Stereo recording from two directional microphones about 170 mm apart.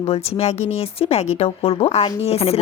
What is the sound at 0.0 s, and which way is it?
A woman's voice, 35° left (ahead or behind).